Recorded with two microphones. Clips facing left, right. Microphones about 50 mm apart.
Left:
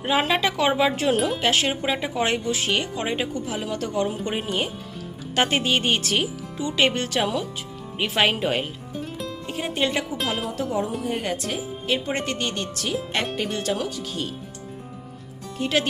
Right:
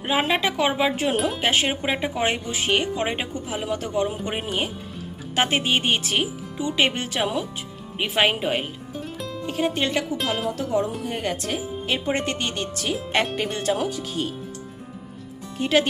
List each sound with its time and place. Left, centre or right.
0.0 s speech: centre
4.4 s speech: centre
15.5 s speech: centre